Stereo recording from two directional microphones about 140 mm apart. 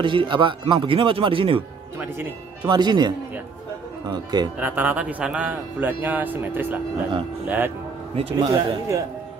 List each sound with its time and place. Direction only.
0.0 s speech: 35° right (ahead or behind)
2.6 s speech: 30° right (ahead or behind)
4.1 s speech: 30° right (ahead or behind)
4.6 s speech: 10° right (ahead or behind)
8.2 s speech: 40° right (ahead or behind)